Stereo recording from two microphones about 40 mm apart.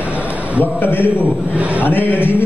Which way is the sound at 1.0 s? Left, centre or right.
Right.